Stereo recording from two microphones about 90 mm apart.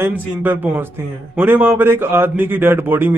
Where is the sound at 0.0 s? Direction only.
25° right (ahead or behind).